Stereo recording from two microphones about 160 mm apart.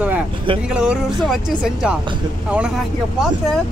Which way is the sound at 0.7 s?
5° right (ahead or behind).